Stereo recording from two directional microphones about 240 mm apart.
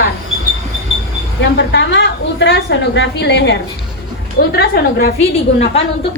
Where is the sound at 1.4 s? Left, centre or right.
Left.